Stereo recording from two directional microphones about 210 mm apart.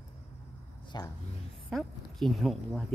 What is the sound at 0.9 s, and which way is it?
Speech, 20° left (ahead or behind).